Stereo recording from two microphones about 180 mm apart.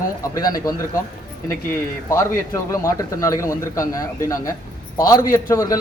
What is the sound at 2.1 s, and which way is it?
A man's voice, 15° left (ahead or behind).